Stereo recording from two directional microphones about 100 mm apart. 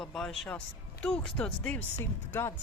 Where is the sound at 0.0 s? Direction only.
5° left (ahead or behind).